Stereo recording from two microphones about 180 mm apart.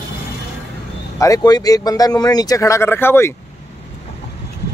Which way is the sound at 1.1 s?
20° left (ahead or behind).